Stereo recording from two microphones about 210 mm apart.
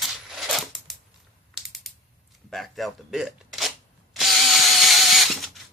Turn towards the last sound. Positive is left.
turn(degrees=0)  # may be behind; listen again after turning